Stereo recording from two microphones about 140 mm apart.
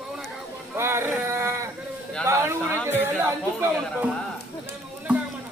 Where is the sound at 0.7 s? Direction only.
20° right (ahead or behind).